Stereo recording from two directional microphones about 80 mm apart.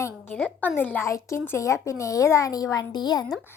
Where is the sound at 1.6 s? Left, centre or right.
Left.